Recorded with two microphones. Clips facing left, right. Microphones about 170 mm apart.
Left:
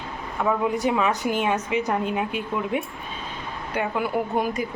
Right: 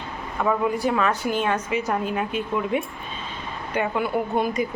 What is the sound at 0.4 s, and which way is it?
Speech, 10° left (ahead or behind).